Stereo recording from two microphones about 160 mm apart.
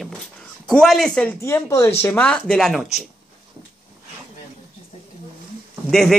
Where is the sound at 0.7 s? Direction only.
Centre (ahead or behind).